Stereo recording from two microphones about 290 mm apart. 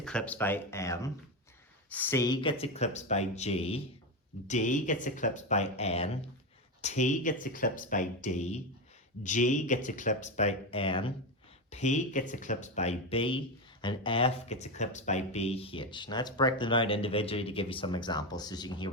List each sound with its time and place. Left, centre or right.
0.0 s speech: centre